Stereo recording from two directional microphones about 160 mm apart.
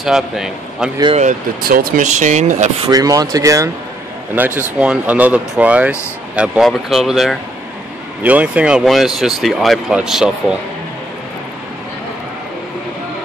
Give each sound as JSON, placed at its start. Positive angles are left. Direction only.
{"t": 0.0, "sound": "speech", "side_deg": -5}
{"t": 1.6, "sound": "speech", "side_deg": -65}
{"t": 2.8, "sound": "speech", "side_deg": -20}